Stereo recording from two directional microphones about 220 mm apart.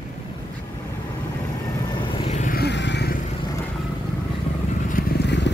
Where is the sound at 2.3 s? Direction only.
35° left (ahead or behind).